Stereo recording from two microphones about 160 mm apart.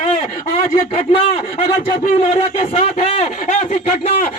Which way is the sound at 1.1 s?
40° left (ahead or behind).